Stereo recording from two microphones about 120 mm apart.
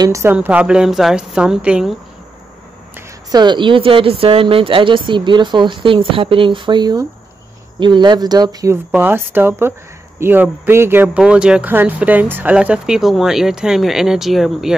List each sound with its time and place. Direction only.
0.0 s speech: 25° right (ahead or behind)
0.3 s speech: 15° right (ahead or behind)
3.3 s speech: 35° right (ahead or behind)
8.9 s speech: 15° right (ahead or behind)
11.1 s speech: 5° right (ahead or behind)